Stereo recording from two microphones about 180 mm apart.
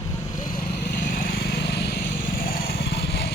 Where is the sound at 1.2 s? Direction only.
55° left (ahead or behind).